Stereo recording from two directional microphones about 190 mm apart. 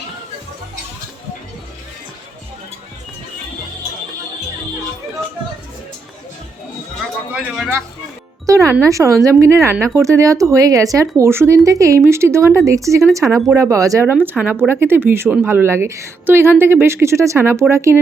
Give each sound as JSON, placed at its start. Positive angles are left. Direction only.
{"t": 7.3, "sound": "speech", "side_deg": -5}
{"t": 8.4, "sound": "a woman's voice", "side_deg": -15}